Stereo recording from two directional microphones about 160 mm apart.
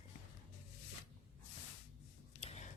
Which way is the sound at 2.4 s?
40° left (ahead or behind).